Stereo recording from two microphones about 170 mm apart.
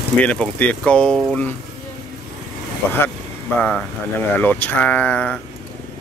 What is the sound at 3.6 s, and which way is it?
Speech, 5° left (ahead or behind).